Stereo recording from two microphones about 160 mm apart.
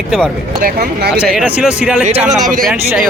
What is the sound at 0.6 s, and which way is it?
Speech, 70° right (ahead or behind).